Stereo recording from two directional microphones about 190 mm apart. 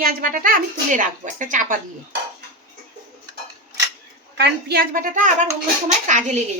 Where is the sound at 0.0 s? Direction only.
50° right (ahead or behind).